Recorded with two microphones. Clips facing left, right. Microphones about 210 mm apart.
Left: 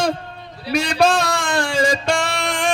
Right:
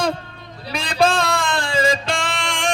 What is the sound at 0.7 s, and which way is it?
Music, 55° right (ahead or behind).